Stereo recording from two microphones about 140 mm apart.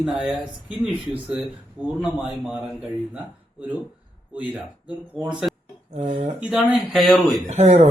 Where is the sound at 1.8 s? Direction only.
10° right (ahead or behind).